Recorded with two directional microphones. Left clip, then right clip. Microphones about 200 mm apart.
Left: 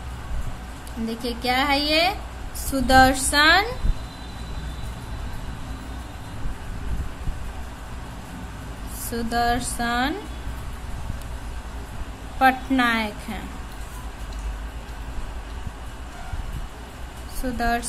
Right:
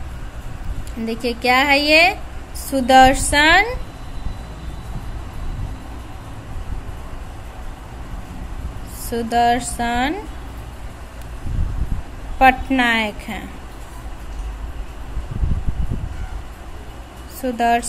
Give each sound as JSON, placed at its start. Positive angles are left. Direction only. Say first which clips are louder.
{"t": 1.0, "sound": "a woman's voice", "louder": "right 7 dB", "side_deg": -20}
{"t": 9.1, "sound": "a woman's voice", "louder": "right 6 dB", "side_deg": -15}
{"t": 12.4, "sound": "a woman's voice", "louder": "right 5 dB", "side_deg": -15}
{"t": 17.4, "sound": "a woman's voice", "louder": "right 7 dB", "side_deg": -15}